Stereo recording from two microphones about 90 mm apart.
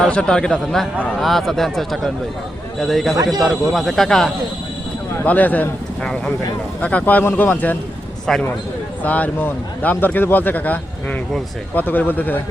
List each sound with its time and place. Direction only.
0.0 s speech: 10° left (ahead or behind)
5.2 s speech: 20° left (ahead or behind)
6.0 s speech: 5° left (ahead or behind)
8.3 s speech: 5° left (ahead or behind)
9.0 s speech: 15° left (ahead or behind)